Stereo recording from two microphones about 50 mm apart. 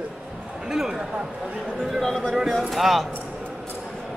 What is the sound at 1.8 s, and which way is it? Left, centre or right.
Speech, centre.